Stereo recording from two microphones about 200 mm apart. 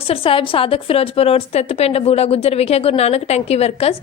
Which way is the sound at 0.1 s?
30° left (ahead or behind).